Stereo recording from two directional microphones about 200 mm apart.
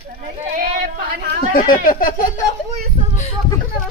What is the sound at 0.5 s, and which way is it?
Speech, 45° right (ahead or behind).